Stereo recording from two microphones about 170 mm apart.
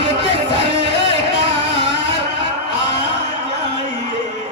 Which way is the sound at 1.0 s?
30° right (ahead or behind).